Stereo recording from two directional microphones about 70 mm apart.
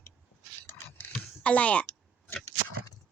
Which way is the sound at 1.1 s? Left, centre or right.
Centre.